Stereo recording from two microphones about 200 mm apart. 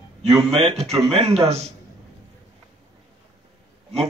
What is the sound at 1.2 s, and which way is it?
Speech, 30° right (ahead or behind).